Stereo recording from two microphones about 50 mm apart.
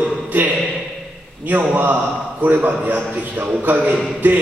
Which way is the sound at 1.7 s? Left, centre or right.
Right.